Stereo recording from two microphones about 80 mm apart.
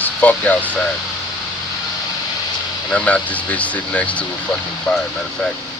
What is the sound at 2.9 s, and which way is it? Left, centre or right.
Speech, centre.